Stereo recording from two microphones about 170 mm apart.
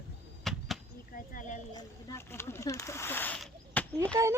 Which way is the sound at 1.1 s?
50° left (ahead or behind).